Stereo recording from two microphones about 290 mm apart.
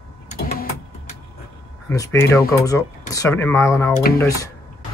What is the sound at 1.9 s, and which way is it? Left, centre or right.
Speech, centre.